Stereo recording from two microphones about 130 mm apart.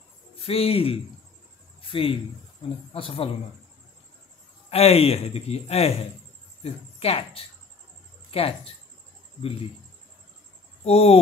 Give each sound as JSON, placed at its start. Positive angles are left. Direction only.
{"t": 0.4, "sound": "a man's voice", "side_deg": 50}
{"t": 1.8, "sound": "cricket", "side_deg": 45}
{"t": 2.9, "sound": "a man's voice", "side_deg": 45}
{"t": 4.6, "sound": "a man's voice", "side_deg": 50}
{"t": 10.8, "sound": "speech", "side_deg": 50}